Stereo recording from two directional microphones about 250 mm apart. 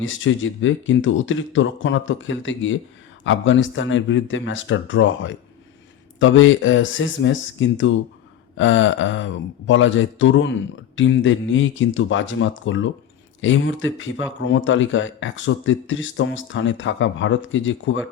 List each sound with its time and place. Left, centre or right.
0.0 s speech: left